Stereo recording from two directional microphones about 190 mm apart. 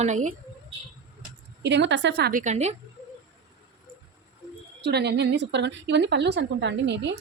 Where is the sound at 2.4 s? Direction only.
35° right (ahead or behind).